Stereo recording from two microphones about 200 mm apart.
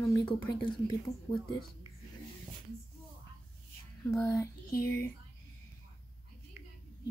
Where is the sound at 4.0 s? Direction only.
10° left (ahead or behind).